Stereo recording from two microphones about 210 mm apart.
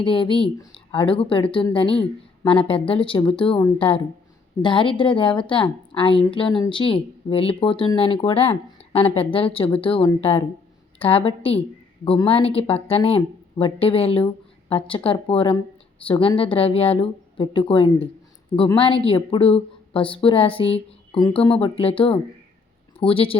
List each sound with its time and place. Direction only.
0.0 s a woman's voice: 25° left (ahead or behind)